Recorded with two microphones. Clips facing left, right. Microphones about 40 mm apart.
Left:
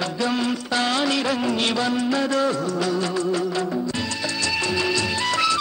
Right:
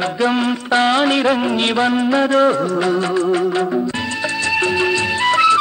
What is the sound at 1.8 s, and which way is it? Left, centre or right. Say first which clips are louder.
Music of bollywood: right 7 dB; right.